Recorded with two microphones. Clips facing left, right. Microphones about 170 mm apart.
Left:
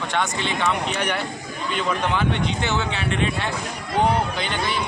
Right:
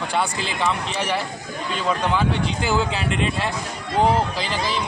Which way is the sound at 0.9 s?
30° right (ahead or behind).